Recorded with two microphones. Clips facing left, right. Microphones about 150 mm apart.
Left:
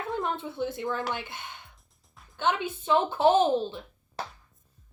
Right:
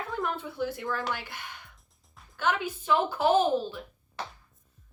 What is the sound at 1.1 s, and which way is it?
A woman's voice, 20° left (ahead or behind).